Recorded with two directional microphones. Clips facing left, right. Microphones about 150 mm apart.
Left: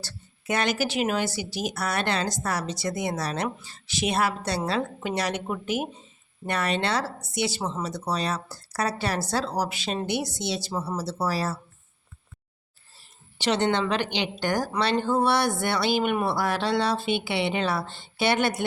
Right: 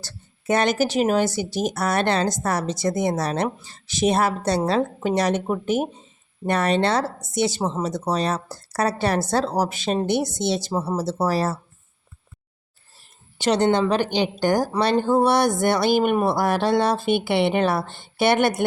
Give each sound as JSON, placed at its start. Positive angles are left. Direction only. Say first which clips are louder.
{"t": 0.0, "sound": "a woman's voice", "louder": "right 6 dB", "side_deg": -45}
{"t": 13.4, "sound": "speech", "louder": "right 5 dB", "side_deg": -40}